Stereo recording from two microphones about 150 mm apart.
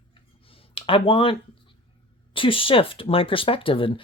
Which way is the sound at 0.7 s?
35° left (ahead or behind).